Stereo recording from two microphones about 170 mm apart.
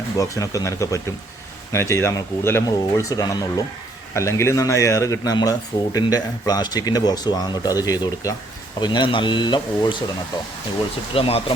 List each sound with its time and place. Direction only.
0.2 s a man's voice: 20° left (ahead or behind)